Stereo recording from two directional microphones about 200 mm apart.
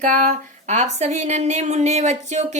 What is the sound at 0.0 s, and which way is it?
Speech, 40° right (ahead or behind).